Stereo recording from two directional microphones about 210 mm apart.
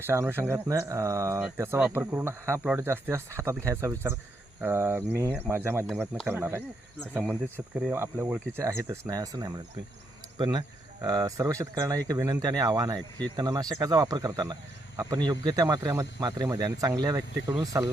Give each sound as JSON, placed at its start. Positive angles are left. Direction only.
{"t": 0.1, "sound": "speech", "side_deg": -10}